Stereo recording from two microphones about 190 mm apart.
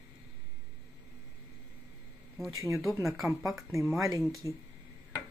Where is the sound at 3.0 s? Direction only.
Centre (ahead or behind).